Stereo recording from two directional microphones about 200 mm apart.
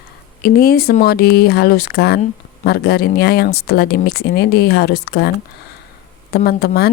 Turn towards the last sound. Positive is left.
turn(degrees=50)  # may be behind; listen again after turning